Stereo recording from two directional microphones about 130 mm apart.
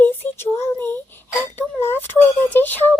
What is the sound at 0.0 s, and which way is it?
Child singing, 15° left (ahead or behind).